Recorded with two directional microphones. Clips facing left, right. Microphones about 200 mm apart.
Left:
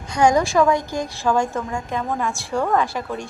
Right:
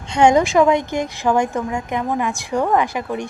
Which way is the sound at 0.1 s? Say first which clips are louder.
Right 3 dB; 25° right (ahead or behind).